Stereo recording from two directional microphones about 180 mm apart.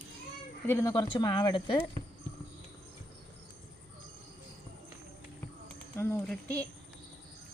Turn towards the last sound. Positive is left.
turn(degrees=5)  # may be behind; listen again after turning